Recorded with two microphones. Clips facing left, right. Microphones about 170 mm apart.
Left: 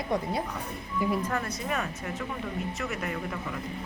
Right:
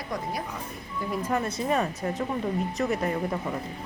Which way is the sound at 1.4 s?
30° right (ahead or behind).